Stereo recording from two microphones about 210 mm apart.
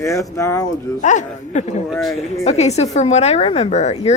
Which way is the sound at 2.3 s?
30° left (ahead or behind).